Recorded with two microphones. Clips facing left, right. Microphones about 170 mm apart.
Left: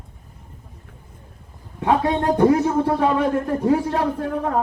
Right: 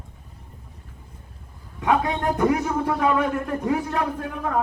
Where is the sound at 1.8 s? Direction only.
30° left (ahead or behind).